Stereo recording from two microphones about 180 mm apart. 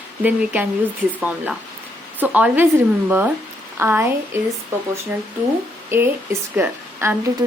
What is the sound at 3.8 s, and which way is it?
Speech, 10° right (ahead or behind).